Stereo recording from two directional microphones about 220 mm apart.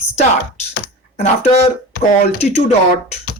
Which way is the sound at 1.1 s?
35° left (ahead or behind).